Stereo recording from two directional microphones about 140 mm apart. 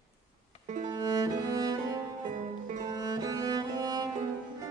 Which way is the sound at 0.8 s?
30° right (ahead or behind).